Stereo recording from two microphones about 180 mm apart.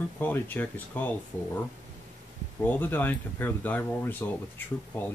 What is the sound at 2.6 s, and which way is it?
Speech, 10° left (ahead or behind).